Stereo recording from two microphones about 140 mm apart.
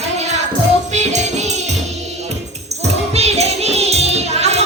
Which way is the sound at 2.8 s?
50° right (ahead or behind).